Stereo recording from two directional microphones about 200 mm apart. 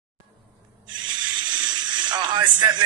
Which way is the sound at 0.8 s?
20° right (ahead or behind).